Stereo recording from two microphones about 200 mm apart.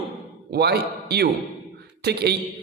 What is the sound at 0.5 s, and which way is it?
A man's voice, 55° right (ahead or behind).